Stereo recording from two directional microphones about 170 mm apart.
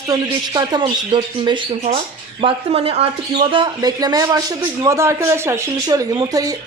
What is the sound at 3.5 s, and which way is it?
Speech, 25° right (ahead or behind).